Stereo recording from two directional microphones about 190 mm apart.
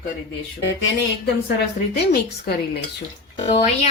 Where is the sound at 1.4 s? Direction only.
60° left (ahead or behind).